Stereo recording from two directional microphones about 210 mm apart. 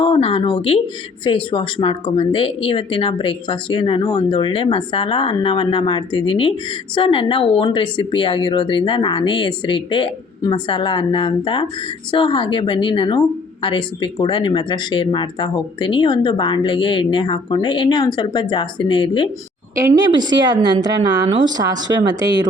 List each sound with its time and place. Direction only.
0.0 s speech: 25° left (ahead or behind)
20.0 s a woman's voice: 20° right (ahead or behind)